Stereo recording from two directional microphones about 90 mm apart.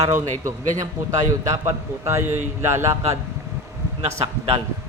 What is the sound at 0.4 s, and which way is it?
A man's voice, 40° right (ahead or behind).